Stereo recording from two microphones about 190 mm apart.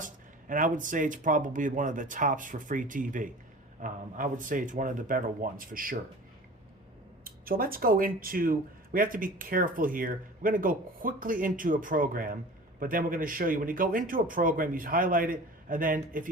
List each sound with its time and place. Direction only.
0.0 s speech: 45° right (ahead or behind)
7.3 s speech: 50° right (ahead or behind)